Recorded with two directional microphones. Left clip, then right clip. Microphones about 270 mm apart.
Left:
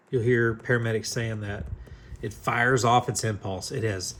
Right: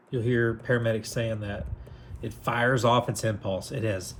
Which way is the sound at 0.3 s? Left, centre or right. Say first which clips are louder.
Left 1 dB; left.